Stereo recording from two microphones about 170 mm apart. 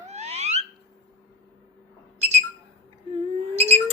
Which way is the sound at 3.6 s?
40° right (ahead or behind).